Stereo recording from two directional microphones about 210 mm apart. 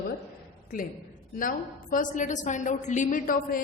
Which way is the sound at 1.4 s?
40° left (ahead or behind).